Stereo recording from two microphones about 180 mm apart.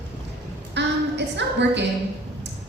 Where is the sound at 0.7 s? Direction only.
75° right (ahead or behind).